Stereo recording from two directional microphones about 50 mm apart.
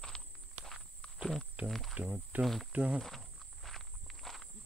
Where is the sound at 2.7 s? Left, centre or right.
Right.